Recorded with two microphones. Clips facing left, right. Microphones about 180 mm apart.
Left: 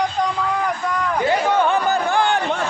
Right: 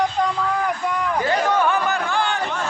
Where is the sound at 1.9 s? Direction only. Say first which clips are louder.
Left 4 dB; 40° left (ahead or behind).